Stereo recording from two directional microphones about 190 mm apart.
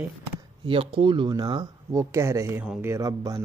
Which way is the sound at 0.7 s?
30° right (ahead or behind).